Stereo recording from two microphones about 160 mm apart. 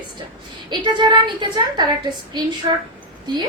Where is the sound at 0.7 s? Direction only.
30° right (ahead or behind).